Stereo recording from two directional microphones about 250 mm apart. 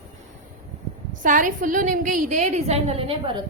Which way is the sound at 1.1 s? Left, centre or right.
Right.